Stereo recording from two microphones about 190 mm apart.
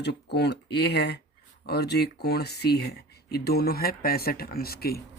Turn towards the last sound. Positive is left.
turn(degrees=55)  # may be behind; listen again after turning